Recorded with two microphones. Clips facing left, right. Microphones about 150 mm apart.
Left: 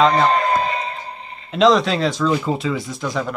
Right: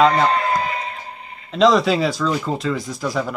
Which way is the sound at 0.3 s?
25° left (ahead or behind).